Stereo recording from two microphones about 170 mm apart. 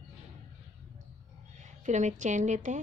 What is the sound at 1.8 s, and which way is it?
Speech, 45° right (ahead or behind).